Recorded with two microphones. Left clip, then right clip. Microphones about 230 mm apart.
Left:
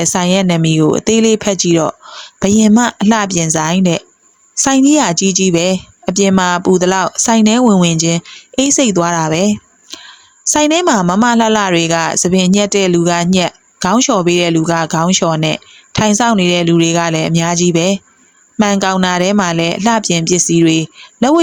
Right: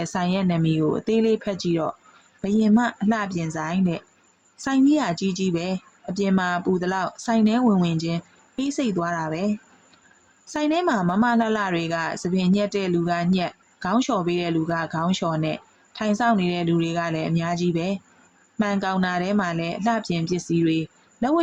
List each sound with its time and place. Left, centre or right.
0.0 s a woman's voice: left